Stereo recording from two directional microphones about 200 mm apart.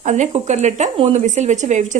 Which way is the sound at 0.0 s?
35° right (ahead or behind).